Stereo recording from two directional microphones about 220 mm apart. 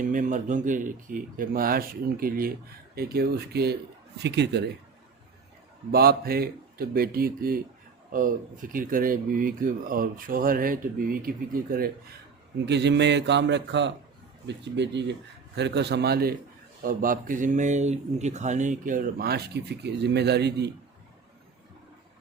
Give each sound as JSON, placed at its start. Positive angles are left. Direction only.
{"t": 0.0, "sound": "speech", "side_deg": -35}
{"t": 5.9, "sound": "speech", "side_deg": -45}